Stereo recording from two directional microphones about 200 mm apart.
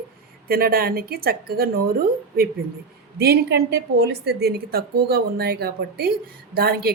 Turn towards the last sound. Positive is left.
turn(degrees=-50)  # may be behind; listen again after turning